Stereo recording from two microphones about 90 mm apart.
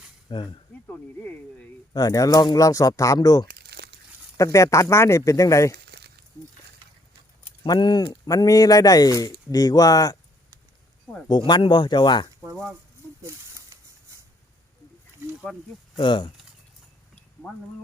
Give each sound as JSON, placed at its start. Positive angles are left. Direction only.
{"t": 0.3, "sound": "speech", "side_deg": 65}
{"t": 0.9, "sound": "speech", "side_deg": 15}
{"t": 1.9, "sound": "speech", "side_deg": 45}
{"t": 7.6, "sound": "speech", "side_deg": 55}
{"t": 11.3, "sound": "speech", "side_deg": 55}
{"t": 13.2, "sound": "snake", "side_deg": -35}
{"t": 16.0, "sound": "speech", "side_deg": 65}